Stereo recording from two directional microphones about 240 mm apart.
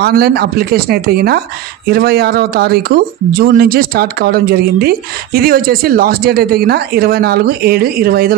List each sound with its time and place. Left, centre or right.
0.0 s speech: right